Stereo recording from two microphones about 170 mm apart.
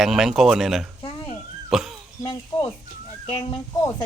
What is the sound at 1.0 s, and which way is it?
Speech, 35° left (ahead or behind).